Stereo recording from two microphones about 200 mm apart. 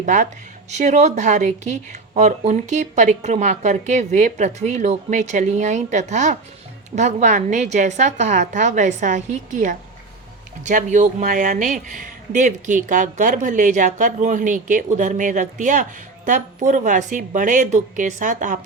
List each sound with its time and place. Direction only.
0.0 s speech: 40° right (ahead or behind)